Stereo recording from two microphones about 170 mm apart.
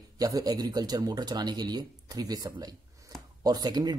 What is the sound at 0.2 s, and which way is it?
Speech, 20° right (ahead or behind).